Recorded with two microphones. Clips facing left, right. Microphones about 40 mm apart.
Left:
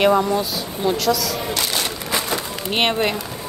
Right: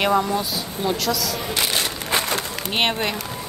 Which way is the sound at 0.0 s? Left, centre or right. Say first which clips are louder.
Left 3 dB; centre.